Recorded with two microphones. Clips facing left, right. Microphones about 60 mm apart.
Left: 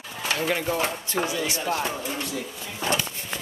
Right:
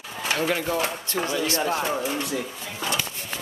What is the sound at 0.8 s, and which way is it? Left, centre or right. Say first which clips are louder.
Speech: left 1 dB; centre.